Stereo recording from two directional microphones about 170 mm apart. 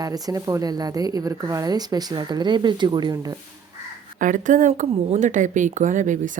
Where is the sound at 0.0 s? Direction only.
20° right (ahead or behind).